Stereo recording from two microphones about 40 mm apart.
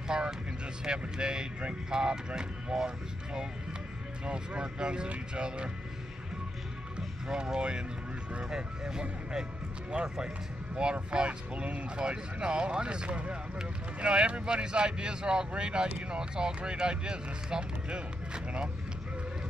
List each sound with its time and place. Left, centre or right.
0.1 s vehicle: centre
0.8 s speech: centre
4.3 s speech: right
7.2 s speech: centre
10.0 s speech: centre